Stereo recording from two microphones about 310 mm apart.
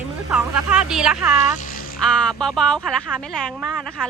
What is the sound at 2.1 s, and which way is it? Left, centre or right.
Speech, centre.